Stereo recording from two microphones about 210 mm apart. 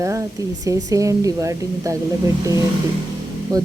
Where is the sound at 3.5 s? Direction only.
15° right (ahead or behind).